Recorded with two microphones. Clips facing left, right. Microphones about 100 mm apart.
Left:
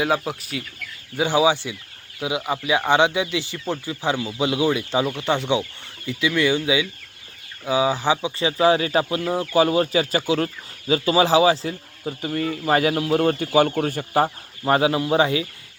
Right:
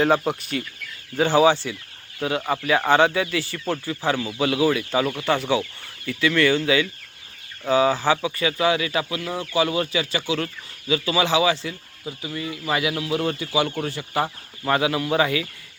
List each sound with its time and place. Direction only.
0.0 s speech: 5° left (ahead or behind); by 15.4 s 25° left (ahead or behind)